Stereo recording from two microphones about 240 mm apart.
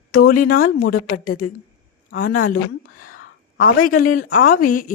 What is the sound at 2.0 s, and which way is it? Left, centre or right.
Speech, left.